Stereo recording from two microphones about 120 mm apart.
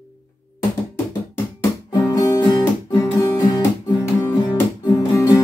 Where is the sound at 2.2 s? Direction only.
35° left (ahead or behind).